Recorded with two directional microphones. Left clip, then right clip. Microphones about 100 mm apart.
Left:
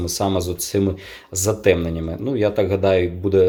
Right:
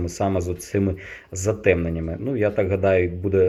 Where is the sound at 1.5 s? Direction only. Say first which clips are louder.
Left 2 dB; 40° left (ahead or behind).